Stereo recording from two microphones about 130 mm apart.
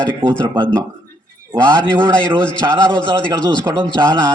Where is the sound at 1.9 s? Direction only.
35° right (ahead or behind).